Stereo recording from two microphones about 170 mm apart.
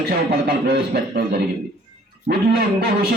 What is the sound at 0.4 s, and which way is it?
Speech, 70° right (ahead or behind).